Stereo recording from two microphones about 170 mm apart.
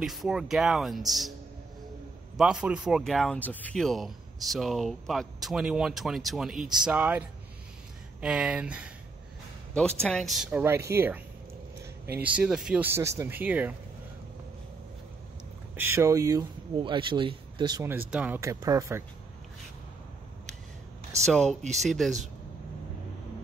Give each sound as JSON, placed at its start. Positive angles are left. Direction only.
{"t": 0.0, "sound": "speech", "side_deg": 0}
{"t": 2.3, "sound": "speech", "side_deg": -5}
{"t": 9.8, "sound": "speech", "side_deg": 5}
{"t": 10.6, "sound": "a man's voice", "side_deg": -15}
{"t": 15.7, "sound": "speech", "side_deg": -15}
{"t": 17.8, "sound": "speech", "side_deg": -10}
{"t": 21.3, "sound": "speech", "side_deg": 0}
{"t": 21.5, "sound": "speech", "side_deg": -40}
{"t": 21.8, "sound": "speech", "side_deg": 0}